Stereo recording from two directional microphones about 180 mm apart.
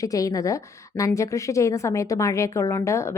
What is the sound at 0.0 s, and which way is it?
A woman's voice, 20° left (ahead or behind).